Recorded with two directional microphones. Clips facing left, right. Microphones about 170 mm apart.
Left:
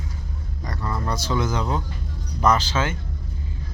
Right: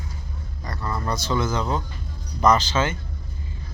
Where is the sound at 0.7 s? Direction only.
10° left (ahead or behind).